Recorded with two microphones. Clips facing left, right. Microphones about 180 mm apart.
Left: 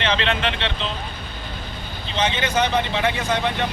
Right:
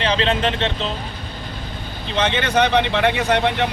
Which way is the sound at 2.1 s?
60° right (ahead or behind).